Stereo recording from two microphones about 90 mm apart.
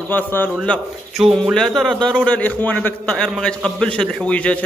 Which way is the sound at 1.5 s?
5° left (ahead or behind).